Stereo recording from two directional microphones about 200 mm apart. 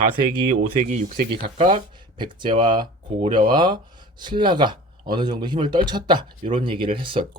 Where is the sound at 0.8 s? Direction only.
40° right (ahead or behind).